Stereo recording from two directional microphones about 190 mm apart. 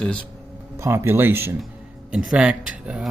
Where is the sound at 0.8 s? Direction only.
15° right (ahead or behind).